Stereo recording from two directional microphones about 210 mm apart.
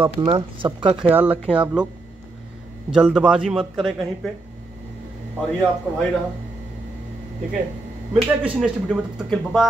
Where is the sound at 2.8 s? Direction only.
5° right (ahead or behind).